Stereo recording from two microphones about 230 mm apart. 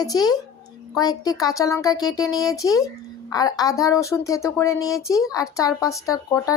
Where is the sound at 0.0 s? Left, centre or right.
Centre.